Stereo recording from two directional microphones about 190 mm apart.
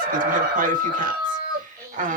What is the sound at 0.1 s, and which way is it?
Speech, 45° right (ahead or behind).